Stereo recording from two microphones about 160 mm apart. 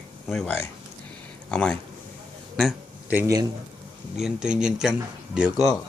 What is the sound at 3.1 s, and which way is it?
Speech, 20° right (ahead or behind).